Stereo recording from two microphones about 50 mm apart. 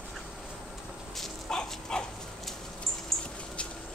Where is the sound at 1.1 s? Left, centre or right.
Centre.